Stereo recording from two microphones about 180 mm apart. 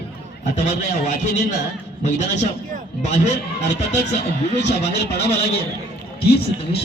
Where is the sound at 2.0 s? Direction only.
40° left (ahead or behind).